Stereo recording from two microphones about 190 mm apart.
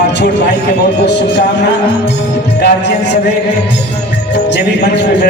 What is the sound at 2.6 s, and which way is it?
Music, 65° left (ahead or behind).